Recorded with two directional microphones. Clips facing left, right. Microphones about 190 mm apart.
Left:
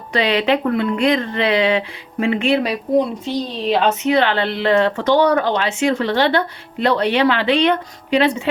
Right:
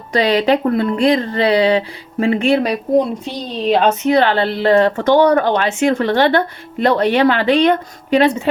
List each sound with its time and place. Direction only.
0.1 s speech: 40° right (ahead or behind)